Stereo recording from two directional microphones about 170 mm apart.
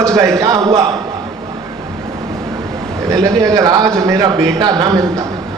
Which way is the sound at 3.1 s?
20° right (ahead or behind).